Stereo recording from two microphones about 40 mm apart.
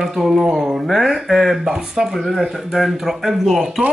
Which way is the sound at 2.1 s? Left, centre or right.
Centre.